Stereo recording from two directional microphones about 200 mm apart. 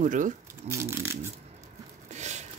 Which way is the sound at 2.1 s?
35° right (ahead or behind).